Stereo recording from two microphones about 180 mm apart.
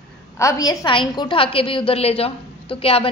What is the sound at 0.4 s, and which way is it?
A woman's voice, 20° left (ahead or behind).